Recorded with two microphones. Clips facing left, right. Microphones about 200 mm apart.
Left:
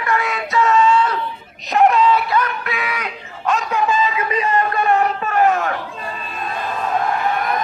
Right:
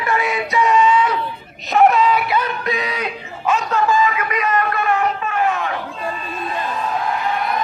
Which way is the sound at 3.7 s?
20° left (ahead or behind).